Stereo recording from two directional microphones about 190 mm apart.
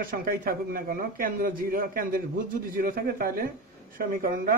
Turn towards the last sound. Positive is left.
turn(degrees=-50)  # may be behind; listen again after turning